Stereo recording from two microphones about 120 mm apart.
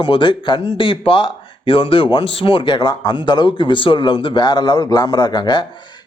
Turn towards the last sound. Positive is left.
turn(degrees=40)  # may be behind; listen again after turning